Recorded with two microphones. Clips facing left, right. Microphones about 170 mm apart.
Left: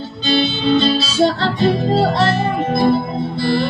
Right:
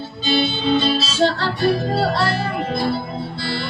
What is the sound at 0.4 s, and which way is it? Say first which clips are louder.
Music: left 3 dB; 10° right (ahead or behind).